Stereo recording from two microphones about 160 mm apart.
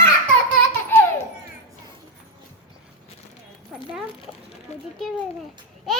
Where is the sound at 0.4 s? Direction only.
15° left (ahead or behind).